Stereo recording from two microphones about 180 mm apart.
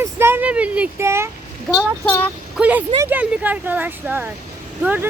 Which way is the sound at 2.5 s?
5° right (ahead or behind).